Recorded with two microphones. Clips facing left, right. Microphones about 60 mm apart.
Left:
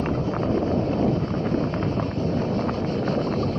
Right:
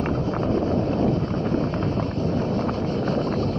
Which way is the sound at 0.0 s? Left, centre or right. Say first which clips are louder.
Right 1 dB; centre.